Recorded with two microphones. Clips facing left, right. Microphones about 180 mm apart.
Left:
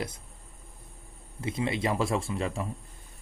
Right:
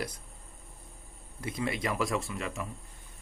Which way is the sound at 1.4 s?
25° left (ahead or behind).